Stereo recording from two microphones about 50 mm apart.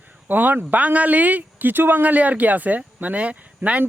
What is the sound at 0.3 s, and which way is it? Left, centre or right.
A man's voice, right.